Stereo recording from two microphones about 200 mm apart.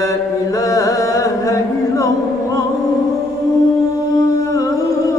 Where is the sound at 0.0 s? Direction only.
15° left (ahead or behind).